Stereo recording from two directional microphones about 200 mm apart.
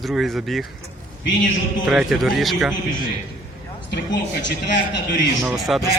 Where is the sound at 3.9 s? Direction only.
60° left (ahead or behind).